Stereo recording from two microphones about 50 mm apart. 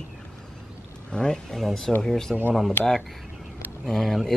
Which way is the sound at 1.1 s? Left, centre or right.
Centre.